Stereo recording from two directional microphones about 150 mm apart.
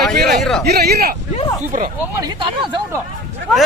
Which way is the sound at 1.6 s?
60° right (ahead or behind).